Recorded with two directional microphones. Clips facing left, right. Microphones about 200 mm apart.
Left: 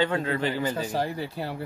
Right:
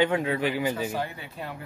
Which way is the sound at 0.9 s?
35° left (ahead or behind).